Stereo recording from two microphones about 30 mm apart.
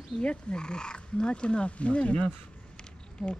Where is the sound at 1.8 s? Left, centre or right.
Left.